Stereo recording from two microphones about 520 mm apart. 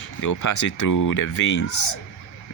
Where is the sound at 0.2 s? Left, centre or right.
Left.